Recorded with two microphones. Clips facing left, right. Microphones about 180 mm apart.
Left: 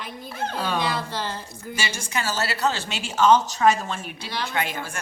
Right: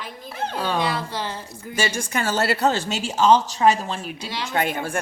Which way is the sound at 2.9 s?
40° right (ahead or behind).